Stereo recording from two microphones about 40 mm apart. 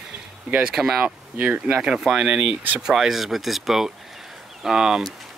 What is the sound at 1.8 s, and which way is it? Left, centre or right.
Speech, right.